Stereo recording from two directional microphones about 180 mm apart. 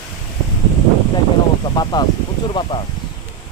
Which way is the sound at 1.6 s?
25° left (ahead or behind).